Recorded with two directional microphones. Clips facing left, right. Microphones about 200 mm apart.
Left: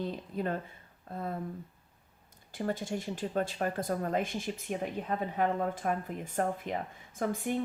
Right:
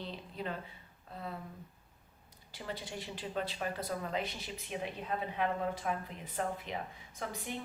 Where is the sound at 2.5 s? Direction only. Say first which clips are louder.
Left 9 dB; 45° left (ahead or behind).